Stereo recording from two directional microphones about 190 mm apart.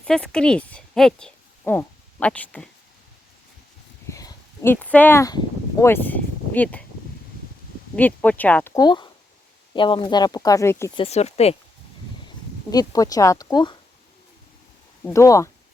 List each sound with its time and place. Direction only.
0.0 s speech: 5° left (ahead or behind)
4.1 s speech: 15° left (ahead or behind)
7.9 s speech: 10° left (ahead or behind)
8.7 s speech: 20° left (ahead or behind)
10.9 s speech: 30° left (ahead or behind)
12.7 s speech: 20° left (ahead or behind)
15.0 s speech: 15° left (ahead or behind)